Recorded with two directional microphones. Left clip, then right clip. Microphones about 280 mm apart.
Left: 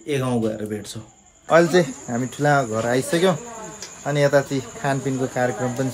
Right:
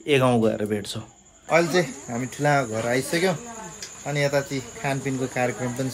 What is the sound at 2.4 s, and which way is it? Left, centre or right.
Speech, centre.